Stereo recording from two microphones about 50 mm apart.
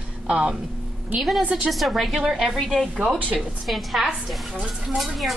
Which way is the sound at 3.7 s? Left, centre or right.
Centre.